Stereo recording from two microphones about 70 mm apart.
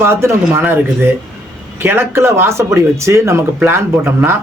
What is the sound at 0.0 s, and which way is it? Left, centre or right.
A man's voice, right.